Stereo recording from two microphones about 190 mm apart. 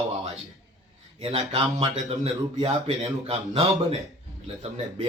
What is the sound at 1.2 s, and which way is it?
Speech, 30° right (ahead or behind).